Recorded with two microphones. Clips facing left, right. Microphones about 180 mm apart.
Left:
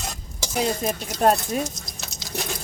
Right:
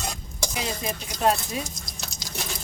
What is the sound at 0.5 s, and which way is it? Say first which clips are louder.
Speech: left 8 dB; 45° left (ahead or behind).